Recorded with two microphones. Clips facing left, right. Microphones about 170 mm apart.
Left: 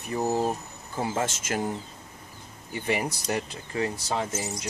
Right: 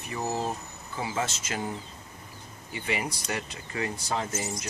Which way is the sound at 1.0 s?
50° left (ahead or behind).